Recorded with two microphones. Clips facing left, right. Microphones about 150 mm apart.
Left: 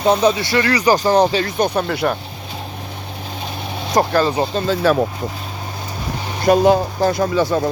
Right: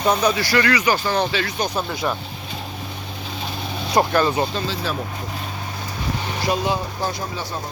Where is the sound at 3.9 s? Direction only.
35° left (ahead or behind).